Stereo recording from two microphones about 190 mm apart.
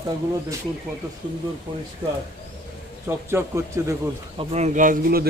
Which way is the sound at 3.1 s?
15° right (ahead or behind).